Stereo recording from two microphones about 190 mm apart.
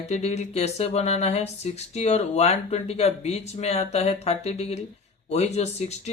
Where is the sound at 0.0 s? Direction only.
35° left (ahead or behind).